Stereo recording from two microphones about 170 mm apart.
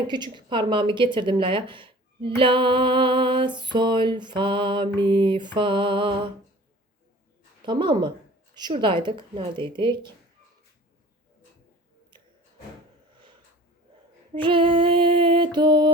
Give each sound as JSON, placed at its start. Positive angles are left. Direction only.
{"t": 0.1, "sound": "speech", "side_deg": -25}
{"t": 7.6, "sound": "speech", "side_deg": -30}
{"t": 14.3, "sound": "speech", "side_deg": -30}